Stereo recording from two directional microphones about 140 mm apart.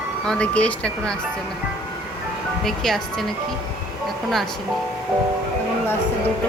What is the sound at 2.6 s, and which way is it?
Speech, centre (ahead or behind).